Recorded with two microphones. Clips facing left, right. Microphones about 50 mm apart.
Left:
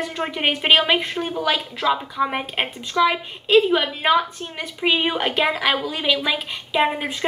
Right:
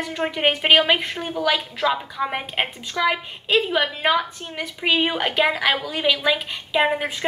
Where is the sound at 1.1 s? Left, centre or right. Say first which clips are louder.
Left 1 dB; centre.